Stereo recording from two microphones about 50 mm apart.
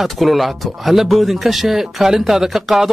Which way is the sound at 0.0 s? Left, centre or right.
Centre.